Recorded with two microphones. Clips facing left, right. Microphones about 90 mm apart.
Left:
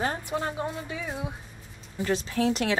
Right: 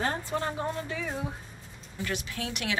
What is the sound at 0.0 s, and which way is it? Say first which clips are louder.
Speech: left 1 dB; 15° left (ahead or behind).